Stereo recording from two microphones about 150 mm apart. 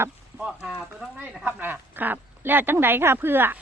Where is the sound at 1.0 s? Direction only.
Centre (ahead or behind).